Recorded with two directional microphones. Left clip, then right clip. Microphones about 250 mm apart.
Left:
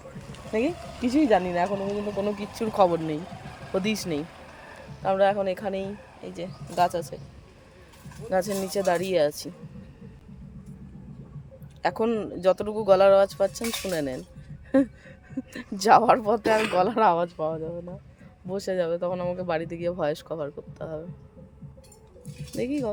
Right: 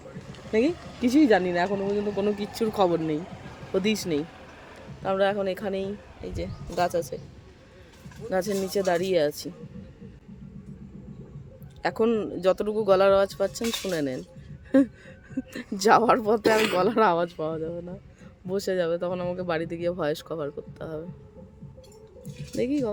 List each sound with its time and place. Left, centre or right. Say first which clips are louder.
0.2 s a sound: left 1 dB; left
0.7 s speech: right 2 dB; left
1.0 s speech: right 1 dB; centre
1.8 s speech: right 2 dB; left
2.6 s speech: left 3 dB; centre
3.2 s a sound: right 1 dB; left
3.8 s speech: right 2 dB; centre
4.2 s a sound: right 1 dB; left
5.0 s speech: left 2 dB; centre
8.3 s speech: left 1 dB; centre
11.8 s speech: right 1 dB; centre
22.5 s speech: right 2 dB; centre